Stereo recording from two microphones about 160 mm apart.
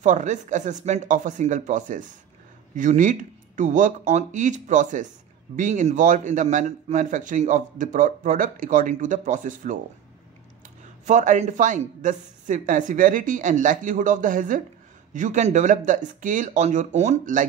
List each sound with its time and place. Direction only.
0.0 s a man's voice: 50° right (ahead or behind)
11.1 s a man's voice: 50° right (ahead or behind)